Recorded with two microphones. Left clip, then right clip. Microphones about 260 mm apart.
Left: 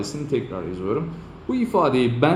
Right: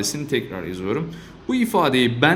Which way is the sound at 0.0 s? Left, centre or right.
Right.